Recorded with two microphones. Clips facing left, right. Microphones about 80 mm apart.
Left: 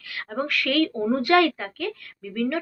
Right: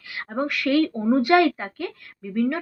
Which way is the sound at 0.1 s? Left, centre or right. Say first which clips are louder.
Right 1 dB; centre.